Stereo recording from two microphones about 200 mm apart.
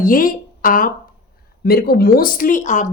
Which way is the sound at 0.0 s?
45° left (ahead or behind).